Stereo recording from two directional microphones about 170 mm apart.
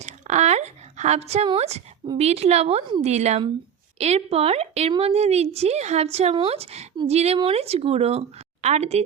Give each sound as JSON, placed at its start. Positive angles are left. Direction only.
{"t": 0.0, "sound": "a woman's voice", "side_deg": -40}